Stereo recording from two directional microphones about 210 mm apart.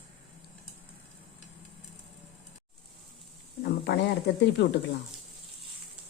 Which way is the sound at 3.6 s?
55° left (ahead or behind).